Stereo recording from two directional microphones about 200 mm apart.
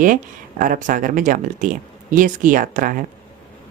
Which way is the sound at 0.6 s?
40° right (ahead or behind).